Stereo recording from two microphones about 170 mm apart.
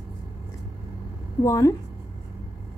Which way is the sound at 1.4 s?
20° left (ahead or behind).